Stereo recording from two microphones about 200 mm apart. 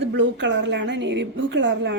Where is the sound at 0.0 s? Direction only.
60° right (ahead or behind).